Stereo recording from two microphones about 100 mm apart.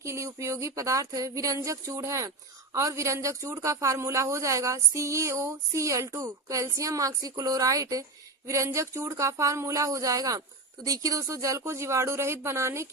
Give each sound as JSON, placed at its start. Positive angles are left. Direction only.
{"t": 0.0, "sound": "speech", "side_deg": -30}